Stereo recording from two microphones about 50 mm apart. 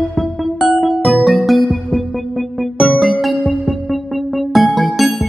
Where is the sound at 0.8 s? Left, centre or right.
Centre.